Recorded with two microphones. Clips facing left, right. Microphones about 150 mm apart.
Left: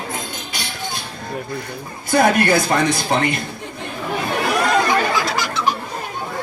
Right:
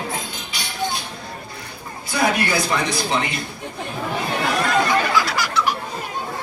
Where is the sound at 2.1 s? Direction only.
50° left (ahead or behind).